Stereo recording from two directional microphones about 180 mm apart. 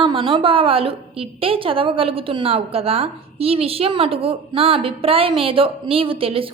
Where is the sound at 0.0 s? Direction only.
30° right (ahead or behind).